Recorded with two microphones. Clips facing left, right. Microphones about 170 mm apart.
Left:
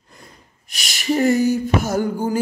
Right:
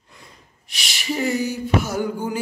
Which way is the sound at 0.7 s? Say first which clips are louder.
Left 6 dB; 45° left (ahead or behind).